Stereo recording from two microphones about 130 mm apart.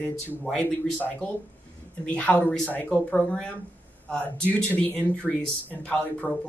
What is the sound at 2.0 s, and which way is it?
Speech, 10° left (ahead or behind).